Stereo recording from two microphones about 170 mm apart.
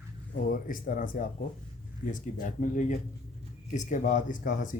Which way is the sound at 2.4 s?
50° left (ahead or behind).